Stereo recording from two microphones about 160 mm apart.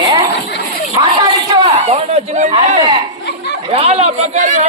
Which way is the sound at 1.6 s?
45° right (ahead or behind).